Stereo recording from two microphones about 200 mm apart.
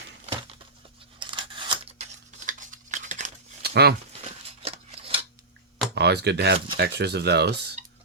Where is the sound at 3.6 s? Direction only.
55° right (ahead or behind).